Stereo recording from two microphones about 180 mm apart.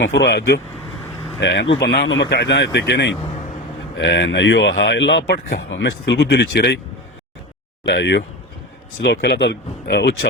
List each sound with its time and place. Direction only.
0.0 s speech: 90° left; by 0.6 s 70° left (ahead or behind)
1.4 s speech: 90° left; by 6.7 s 65° left (ahead or behind)
7.9 s speech: 75° left (ahead or behind)